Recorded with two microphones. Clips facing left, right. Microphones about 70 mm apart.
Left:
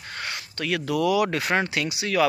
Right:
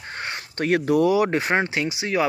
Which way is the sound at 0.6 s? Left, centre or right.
Right.